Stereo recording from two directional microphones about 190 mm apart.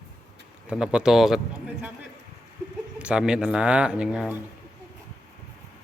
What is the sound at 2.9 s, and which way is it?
Speech, 5° right (ahead or behind).